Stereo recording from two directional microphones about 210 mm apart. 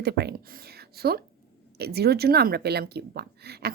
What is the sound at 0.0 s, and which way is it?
Speech, 50° right (ahead or behind).